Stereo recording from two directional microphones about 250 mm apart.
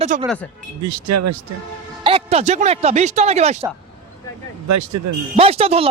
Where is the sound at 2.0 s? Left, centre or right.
Right.